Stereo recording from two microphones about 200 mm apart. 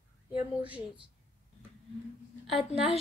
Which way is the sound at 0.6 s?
5° right (ahead or behind).